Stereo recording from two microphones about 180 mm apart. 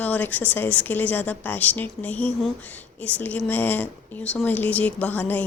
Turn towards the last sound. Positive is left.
turn(degrees=10)  # may be behind; listen again after turning